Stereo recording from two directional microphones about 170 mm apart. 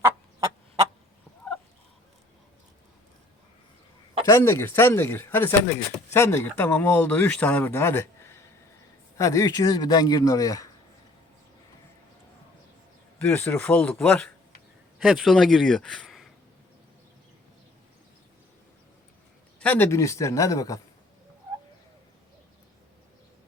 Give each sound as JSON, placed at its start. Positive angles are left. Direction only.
{"t": 0.0, "sound": "fowl", "side_deg": -20}
{"t": 4.3, "sound": "a man's voice", "side_deg": 15}
{"t": 13.1, "sound": "speech", "side_deg": 10}
{"t": 19.5, "sound": "speech", "side_deg": 10}